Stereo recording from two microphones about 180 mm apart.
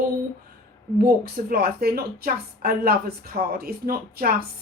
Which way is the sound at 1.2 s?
60° right (ahead or behind).